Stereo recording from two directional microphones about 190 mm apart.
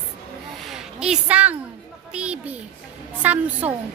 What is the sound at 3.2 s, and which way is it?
Speech, 10° right (ahead or behind).